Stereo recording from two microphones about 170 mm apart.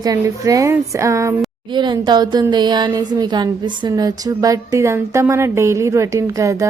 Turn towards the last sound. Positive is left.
turn(degrees=-20)  # may be behind; listen again after turning